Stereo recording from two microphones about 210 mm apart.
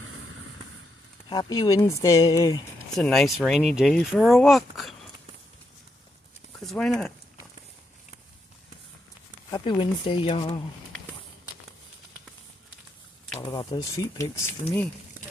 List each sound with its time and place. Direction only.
1.3 s speech: 20° left (ahead or behind)
3.0 s speech: centre (ahead or behind)
6.6 s speech: centre (ahead or behind)
9.5 s speech: 20° left (ahead or behind)
13.4 s speech: 20° left (ahead or behind)